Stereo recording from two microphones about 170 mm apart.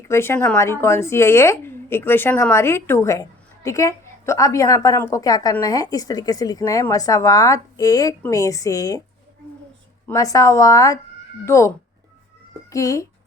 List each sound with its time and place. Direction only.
0.1 s a woman's voice: 15° left (ahead or behind)
10.1 s a woman's voice: 20° left (ahead or behind)
12.7 s a woman's voice: 20° left (ahead or behind)